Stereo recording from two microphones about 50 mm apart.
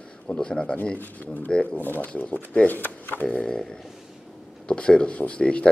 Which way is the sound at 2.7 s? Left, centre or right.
Left.